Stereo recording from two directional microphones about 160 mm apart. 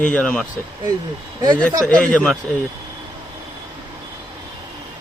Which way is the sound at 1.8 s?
5° left (ahead or behind).